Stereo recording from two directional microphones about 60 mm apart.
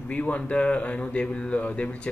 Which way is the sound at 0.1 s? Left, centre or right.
Left.